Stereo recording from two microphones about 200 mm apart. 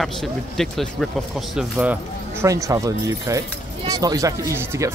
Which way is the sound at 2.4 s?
15° right (ahead or behind).